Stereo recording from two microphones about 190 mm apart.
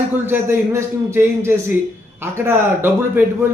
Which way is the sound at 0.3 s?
10° right (ahead or behind).